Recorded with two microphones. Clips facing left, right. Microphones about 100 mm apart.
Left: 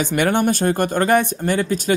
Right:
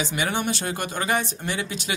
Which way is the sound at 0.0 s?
55° left (ahead or behind).